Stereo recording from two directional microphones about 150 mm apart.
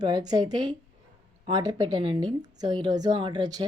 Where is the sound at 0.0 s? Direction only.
25° right (ahead or behind).